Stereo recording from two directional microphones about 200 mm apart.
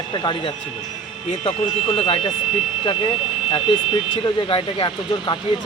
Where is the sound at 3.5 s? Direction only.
25° left (ahead or behind).